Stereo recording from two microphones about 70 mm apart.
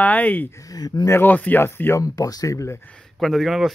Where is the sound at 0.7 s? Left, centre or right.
Left.